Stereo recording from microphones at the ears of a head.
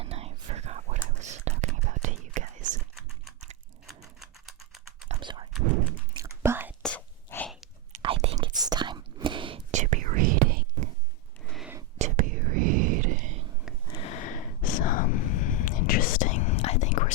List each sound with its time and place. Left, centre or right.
0.0 s whispering: right
3.8 s typing: centre
5.0 s whispering: right
7.9 s whispering: right
11.9 s whispering: right
13.8 s a sound: left